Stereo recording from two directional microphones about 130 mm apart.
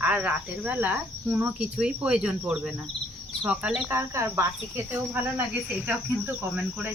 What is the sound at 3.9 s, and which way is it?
Speech, 20° right (ahead or behind).